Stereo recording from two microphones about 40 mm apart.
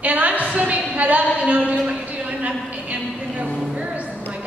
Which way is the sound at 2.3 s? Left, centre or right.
Right.